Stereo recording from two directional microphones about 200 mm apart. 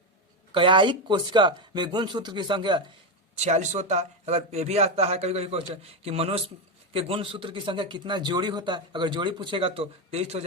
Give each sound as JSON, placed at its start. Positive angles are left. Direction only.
{"t": 0.5, "sound": "a man's voice", "side_deg": -25}
{"t": 3.3, "sound": "a man's voice", "side_deg": -35}